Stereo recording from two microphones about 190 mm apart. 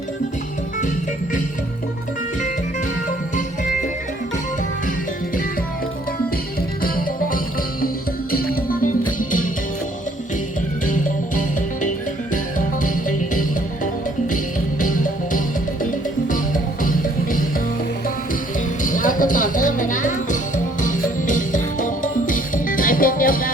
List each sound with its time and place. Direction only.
6.8 s music: 50° left (ahead or behind)
10.8 s music: 45° left (ahead or behind)
16.8 s music: 45° left (ahead or behind)
18.8 s music: 45° left (ahead or behind)